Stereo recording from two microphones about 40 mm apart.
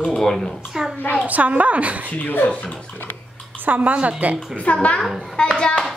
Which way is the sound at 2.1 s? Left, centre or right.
Left.